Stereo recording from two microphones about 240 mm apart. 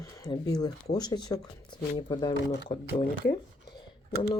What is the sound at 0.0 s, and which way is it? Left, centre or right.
Speech, centre.